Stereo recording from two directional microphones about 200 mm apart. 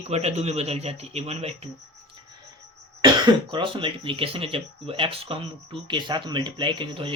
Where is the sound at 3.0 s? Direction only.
20° right (ahead or behind).